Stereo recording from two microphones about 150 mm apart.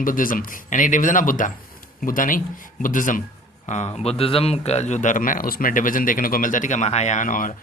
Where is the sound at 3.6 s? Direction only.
50° left (ahead or behind).